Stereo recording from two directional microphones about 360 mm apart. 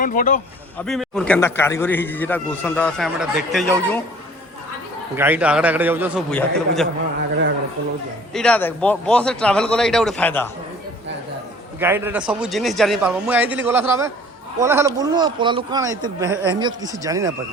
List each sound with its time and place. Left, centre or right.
0.0 s a man's voice: left
0.9 s a man's voice: centre
5.1 s a man's voice: centre
8.3 s a man's voice: centre
11.8 s a man's voice: centre